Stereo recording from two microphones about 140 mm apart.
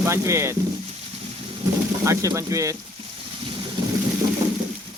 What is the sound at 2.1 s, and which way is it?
Speech, 25° right (ahead or behind).